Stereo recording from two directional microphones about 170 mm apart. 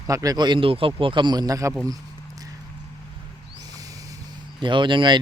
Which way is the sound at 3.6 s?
20° right (ahead or behind).